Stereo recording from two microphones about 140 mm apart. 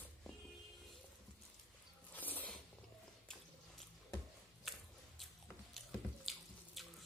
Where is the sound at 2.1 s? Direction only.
10° left (ahead or behind).